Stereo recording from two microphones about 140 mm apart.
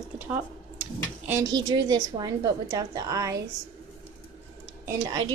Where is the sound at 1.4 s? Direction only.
30° right (ahead or behind).